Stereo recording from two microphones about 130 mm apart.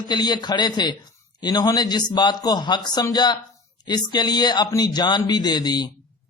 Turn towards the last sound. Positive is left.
turn(degrees=30)  # may be behind; listen again after turning